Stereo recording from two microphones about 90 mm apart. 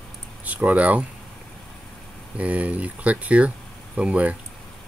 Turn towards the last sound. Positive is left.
turn(degrees=-15)  # may be behind; listen again after turning